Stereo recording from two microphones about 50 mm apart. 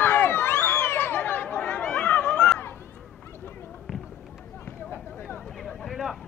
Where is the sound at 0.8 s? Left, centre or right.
Left.